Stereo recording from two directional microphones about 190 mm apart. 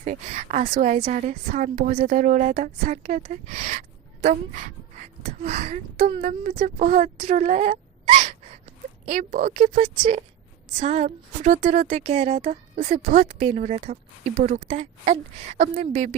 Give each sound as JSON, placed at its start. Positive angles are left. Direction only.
{"t": 0.0, "sound": "a woman's voice", "side_deg": -40}